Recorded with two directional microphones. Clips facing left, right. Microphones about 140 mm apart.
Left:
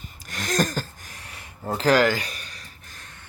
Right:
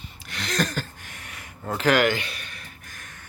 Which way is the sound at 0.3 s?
45° left (ahead or behind).